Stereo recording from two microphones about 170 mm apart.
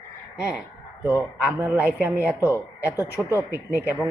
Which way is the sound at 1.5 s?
10° right (ahead or behind).